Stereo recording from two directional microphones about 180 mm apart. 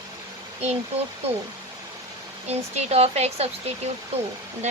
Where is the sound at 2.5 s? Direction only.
35° right (ahead or behind).